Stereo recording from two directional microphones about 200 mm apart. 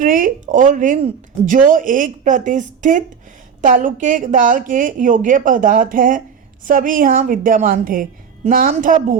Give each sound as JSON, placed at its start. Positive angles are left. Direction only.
{"t": 0.0, "sound": "a woman's voice", "side_deg": -40}